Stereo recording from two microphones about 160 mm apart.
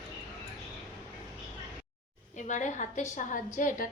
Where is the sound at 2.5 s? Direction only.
50° left (ahead or behind).